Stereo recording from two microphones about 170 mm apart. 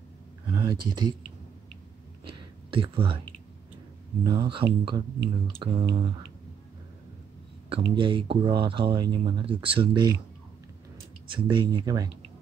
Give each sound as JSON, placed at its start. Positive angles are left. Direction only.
{"t": 0.5, "sound": "speech", "side_deg": -25}
{"t": 2.3, "sound": "a sound", "side_deg": -30}
{"t": 4.2, "sound": "speech", "side_deg": -25}
{"t": 7.7, "sound": "speech", "side_deg": -30}
{"t": 11.2, "sound": "speech", "side_deg": -30}